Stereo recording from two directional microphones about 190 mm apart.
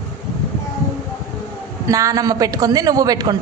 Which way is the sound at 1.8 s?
15° right (ahead or behind).